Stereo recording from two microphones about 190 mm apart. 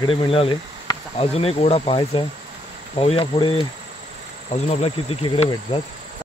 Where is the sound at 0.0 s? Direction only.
25° left (ahead or behind).